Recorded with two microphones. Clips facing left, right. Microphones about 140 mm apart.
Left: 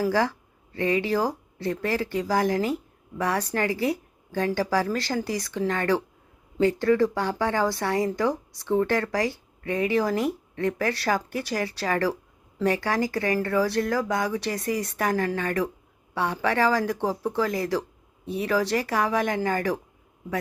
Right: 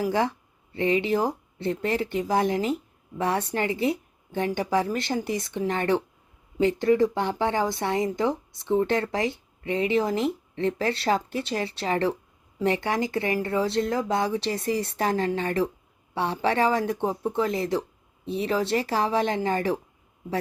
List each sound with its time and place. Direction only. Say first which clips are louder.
0.0 s speech: left 1 dB; 20° right (ahead or behind)